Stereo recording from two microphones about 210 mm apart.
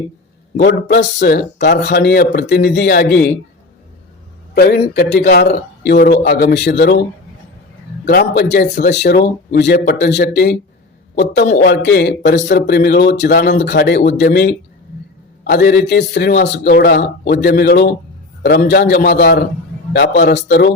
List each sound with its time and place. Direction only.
0.5 s a man's voice: 55° left (ahead or behind)
4.5 s a man's voice: 45° left (ahead or behind)
8.0 s a man's voice: 50° left (ahead or behind)